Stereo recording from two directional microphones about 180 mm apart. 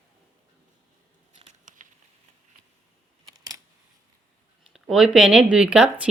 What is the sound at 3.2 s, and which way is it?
Camera, 20° right (ahead or behind).